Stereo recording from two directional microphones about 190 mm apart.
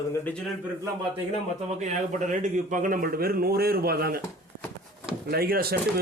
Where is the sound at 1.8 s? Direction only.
40° right (ahead or behind).